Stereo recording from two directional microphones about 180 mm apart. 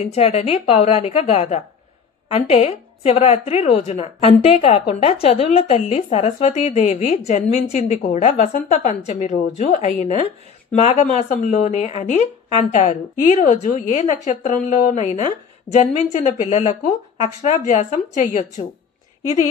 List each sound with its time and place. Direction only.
0.1 s a woman's voice: 35° left (ahead or behind)